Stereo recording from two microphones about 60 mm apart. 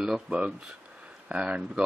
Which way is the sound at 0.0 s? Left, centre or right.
Centre.